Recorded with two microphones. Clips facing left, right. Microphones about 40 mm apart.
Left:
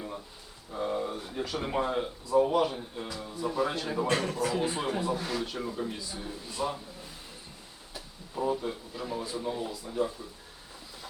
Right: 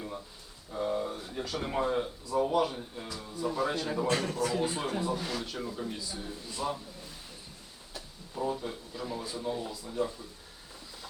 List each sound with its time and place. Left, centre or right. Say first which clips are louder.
0.7 s a sound: even; centre
1.1 s a man's voice: left 2 dB; centre
4.0 s speech: left 2 dB; left
4.4 s a man's voice: left 1 dB; centre
7.9 s a man's voice: left 2 dB; centre